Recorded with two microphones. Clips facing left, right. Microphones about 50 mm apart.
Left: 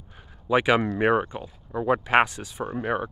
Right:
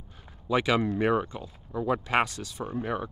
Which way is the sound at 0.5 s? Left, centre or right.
Left.